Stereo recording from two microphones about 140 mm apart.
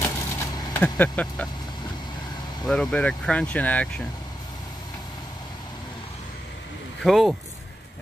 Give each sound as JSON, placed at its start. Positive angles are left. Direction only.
{"t": 0.0, "sound": "a sound", "side_deg": 15}
{"t": 0.8, "sound": "speech", "side_deg": 10}
{"t": 2.6, "sound": "speech", "side_deg": 5}
{"t": 7.0, "sound": "speech", "side_deg": 0}